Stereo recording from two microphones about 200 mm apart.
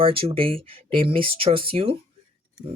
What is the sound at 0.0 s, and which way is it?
Speech, 25° right (ahead or behind).